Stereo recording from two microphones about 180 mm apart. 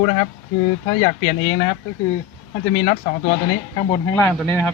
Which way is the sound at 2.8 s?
35° left (ahead or behind).